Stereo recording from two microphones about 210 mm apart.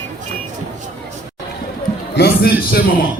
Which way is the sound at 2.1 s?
45° left (ahead or behind).